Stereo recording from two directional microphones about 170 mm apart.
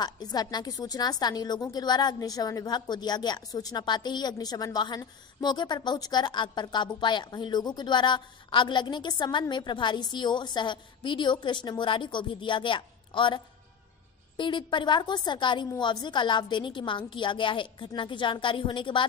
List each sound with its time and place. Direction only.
0.0 s a woman's voice: 25° left (ahead or behind)